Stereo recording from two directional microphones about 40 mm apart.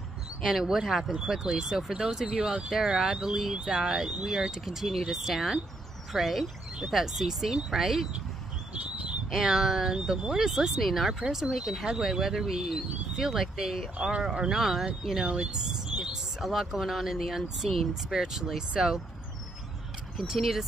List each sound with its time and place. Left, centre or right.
0.4 s speech: centre
2.0 s speech: right
2.7 s speech: centre
8.8 s bird: right
9.3 s speech: centre
10.5 s speech: centre
14.2 s speech: centre
14.6 s speech: centre
15.2 s a sound: right
16.3 s speech: centre
18.1 s speech: centre
20.2 s speech: centre